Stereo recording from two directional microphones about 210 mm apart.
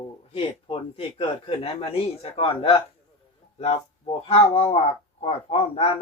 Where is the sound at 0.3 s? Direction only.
25° left (ahead or behind).